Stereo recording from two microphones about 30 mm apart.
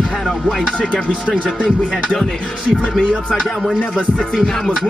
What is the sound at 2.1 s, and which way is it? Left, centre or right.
Speech, left.